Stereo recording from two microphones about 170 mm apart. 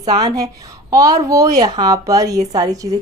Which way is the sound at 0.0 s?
20° right (ahead or behind).